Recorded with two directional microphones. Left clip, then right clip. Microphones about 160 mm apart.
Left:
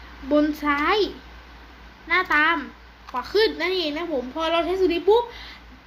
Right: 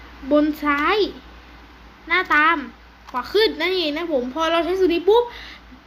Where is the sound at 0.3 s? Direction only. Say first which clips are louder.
Right 3 dB; 5° right (ahead or behind).